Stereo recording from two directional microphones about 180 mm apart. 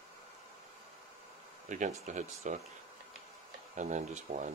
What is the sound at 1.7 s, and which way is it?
Speech, 45° right (ahead or behind).